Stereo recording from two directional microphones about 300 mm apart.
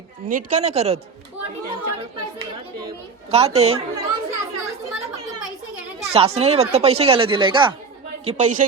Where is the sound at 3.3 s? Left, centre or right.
Centre.